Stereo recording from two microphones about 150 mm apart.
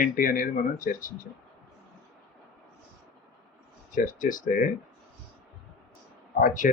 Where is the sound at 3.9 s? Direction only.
65° left (ahead or behind).